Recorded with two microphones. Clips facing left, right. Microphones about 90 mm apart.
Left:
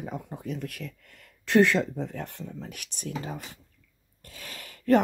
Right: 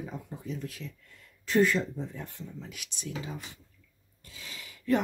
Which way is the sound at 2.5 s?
50° left (ahead or behind).